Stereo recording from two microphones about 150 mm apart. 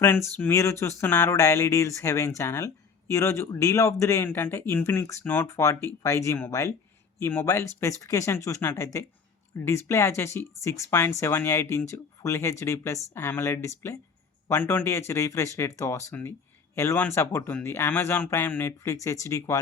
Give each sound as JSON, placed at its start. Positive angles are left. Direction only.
{"t": 0.0, "sound": "speech", "side_deg": 15}